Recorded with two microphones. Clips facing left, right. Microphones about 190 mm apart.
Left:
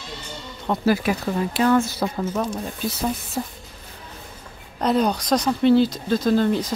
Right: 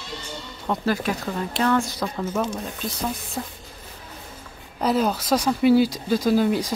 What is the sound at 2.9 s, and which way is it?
Speech, 5° left (ahead or behind).